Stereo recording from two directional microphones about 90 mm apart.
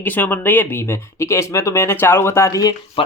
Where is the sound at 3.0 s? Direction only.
90° left.